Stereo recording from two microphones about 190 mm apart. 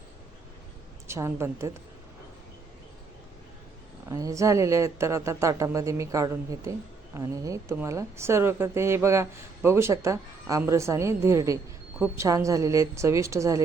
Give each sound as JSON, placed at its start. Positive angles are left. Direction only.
{"t": 1.0, "sound": "speech", "side_deg": -15}
{"t": 4.1, "sound": "speech", "side_deg": -15}